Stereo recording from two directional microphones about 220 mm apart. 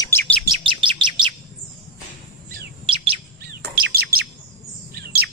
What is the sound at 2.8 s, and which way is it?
Chirp, 25° right (ahead or behind).